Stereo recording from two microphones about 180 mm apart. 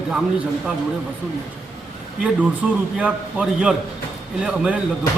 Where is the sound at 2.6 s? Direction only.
5° right (ahead or behind).